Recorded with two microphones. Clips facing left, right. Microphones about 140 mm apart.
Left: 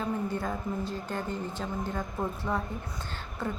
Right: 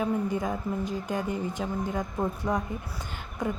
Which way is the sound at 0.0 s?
15° right (ahead or behind).